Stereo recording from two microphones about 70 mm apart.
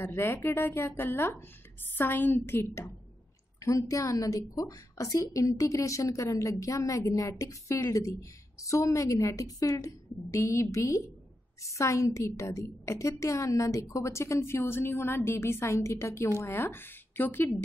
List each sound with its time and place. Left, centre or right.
0.0 s a woman's voice: left
3.6 s a woman's voice: left